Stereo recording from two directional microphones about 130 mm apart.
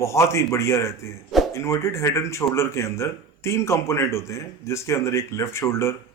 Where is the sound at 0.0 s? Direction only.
20° left (ahead or behind).